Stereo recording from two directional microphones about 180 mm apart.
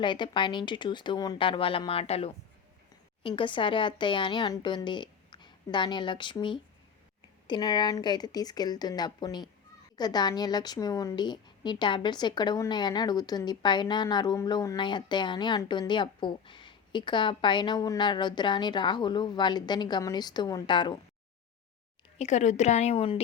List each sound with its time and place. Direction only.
0.0 s a woman's voice: 25° left (ahead or behind)
22.2 s speech: 40° left (ahead or behind)